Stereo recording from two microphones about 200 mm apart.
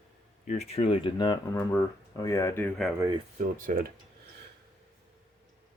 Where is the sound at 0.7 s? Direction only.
30° left (ahead or behind); by 2.7 s 15° left (ahead or behind).